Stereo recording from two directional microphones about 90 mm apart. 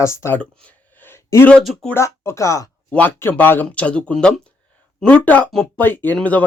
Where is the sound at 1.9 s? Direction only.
30° left (ahead or behind).